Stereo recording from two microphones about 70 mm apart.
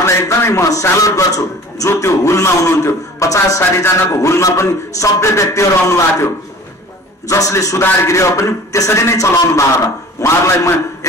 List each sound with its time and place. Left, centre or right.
0.0 s music: left
1.9 s music: left
7.8 s music: left